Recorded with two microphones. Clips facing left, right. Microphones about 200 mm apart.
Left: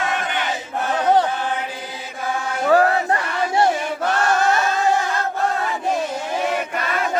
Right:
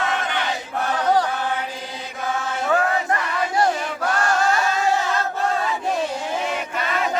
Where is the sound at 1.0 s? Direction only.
25° left (ahead or behind).